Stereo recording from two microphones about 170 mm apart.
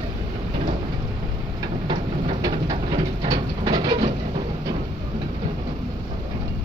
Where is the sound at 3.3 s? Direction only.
25° right (ahead or behind).